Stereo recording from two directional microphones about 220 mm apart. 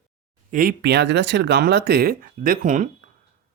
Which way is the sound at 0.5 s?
45° right (ahead or behind).